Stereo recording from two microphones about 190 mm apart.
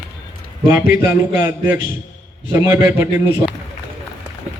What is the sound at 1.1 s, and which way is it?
A man's voice, 15° right (ahead or behind).